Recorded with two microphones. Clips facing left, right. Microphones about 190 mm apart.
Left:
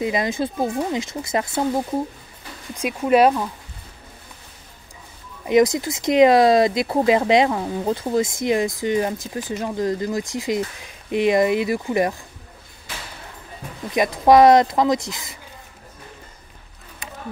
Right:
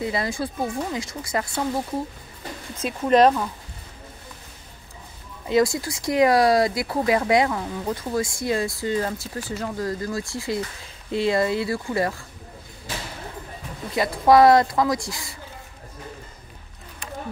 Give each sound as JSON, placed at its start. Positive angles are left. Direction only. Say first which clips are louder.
{"t": 0.0, "sound": "speech", "louder": "left 4 dB", "side_deg": 20}
{"t": 2.7, "sound": "speech", "louder": "left 2 dB", "side_deg": 10}
{"t": 5.5, "sound": "speech", "louder": "left 4 dB", "side_deg": 20}
{"t": 13.9, "sound": "speech", "louder": "left 2 dB", "side_deg": 20}